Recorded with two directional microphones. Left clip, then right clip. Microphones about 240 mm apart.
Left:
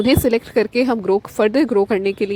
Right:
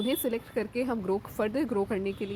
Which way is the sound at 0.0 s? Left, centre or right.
Left.